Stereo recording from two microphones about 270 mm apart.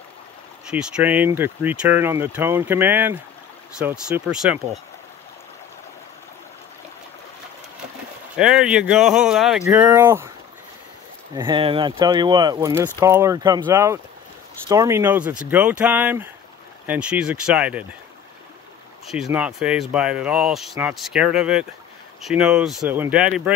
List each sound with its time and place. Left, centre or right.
0.7 s speech: centre
8.4 s speech: centre
11.3 s speech: centre
19.2 s speech: centre